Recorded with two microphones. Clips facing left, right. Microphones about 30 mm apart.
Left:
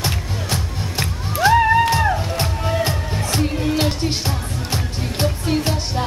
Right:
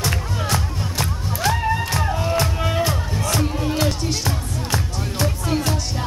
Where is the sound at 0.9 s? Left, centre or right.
Left.